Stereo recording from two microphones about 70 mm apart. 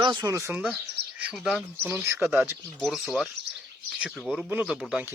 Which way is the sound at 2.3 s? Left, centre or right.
Right.